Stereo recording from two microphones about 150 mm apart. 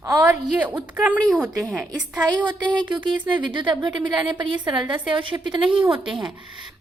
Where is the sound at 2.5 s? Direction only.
30° right (ahead or behind).